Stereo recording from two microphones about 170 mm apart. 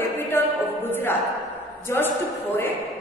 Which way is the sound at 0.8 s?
10° left (ahead or behind).